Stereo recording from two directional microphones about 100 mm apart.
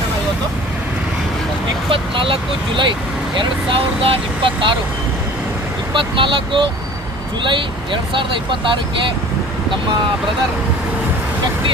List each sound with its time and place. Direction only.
1.9 s speech: 65° right (ahead or behind)
5.9 s speech: 55° right (ahead or behind)
8.1 s speech: 55° right (ahead or behind)